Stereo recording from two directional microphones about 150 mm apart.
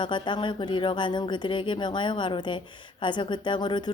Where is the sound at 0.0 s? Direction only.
30° left (ahead or behind).